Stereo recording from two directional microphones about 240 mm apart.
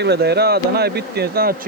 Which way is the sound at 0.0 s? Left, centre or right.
Right.